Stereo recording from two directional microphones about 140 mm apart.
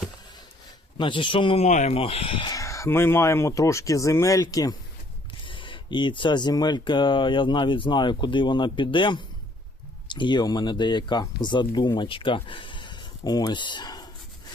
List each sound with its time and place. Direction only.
0.9 s speech: 35° left (ahead or behind)
1.6 s speech: 55° left (ahead or behind)
2.0 s speech: 40° left (ahead or behind)
2.5 s speech: 20° left (ahead or behind)
5.3 s speech: 35° left (ahead or behind)